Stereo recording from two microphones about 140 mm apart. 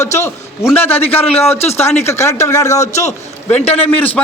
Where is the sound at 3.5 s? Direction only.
45° left (ahead or behind).